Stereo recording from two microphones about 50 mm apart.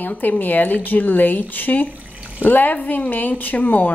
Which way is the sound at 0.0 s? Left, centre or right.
Left.